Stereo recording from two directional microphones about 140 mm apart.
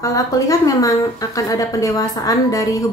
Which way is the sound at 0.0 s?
25° left (ahead or behind).